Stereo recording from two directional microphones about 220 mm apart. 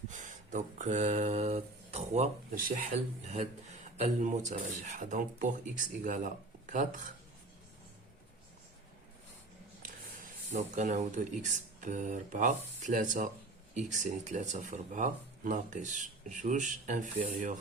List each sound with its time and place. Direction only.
0.1 s a sound: 35° right (ahead or behind)
3.2 s speech: 30° right (ahead or behind)
9.8 s speech: 35° right (ahead or behind)